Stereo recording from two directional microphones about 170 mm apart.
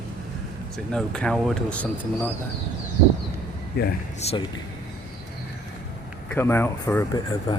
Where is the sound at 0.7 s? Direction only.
5° left (ahead or behind).